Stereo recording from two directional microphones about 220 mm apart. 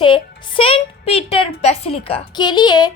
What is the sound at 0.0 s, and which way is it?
Speech, 25° left (ahead or behind).